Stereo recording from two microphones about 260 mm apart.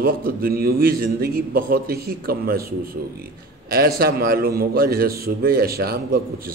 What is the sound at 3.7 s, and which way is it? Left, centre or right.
A man's voice, right.